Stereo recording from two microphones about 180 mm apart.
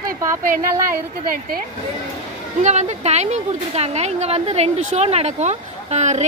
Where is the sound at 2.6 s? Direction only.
40° right (ahead or behind).